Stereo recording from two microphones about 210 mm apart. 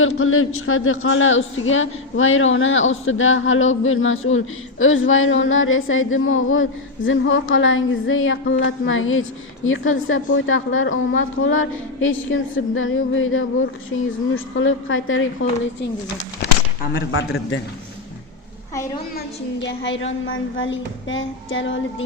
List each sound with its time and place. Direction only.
0.0 s a woman's voice: 75° left (ahead or behind)
16.8 s a woman's voice: 60° left (ahead or behind)
19.6 s a woman's voice: 60° left (ahead or behind)